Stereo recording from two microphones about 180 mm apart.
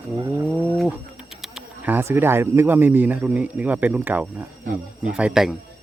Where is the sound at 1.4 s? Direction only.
5° right (ahead or behind).